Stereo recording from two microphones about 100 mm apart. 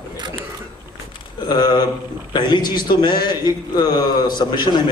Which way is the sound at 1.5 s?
50° left (ahead or behind).